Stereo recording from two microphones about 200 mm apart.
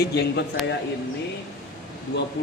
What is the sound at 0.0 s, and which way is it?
Speech, 55° left (ahead or behind).